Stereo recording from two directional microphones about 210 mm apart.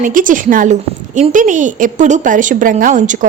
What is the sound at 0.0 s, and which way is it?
A woman's voice, 40° right (ahead or behind).